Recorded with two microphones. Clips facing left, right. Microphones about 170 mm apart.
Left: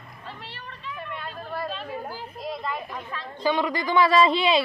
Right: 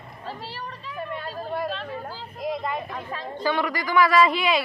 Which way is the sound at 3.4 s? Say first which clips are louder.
Left 1 dB; 20° left (ahead or behind).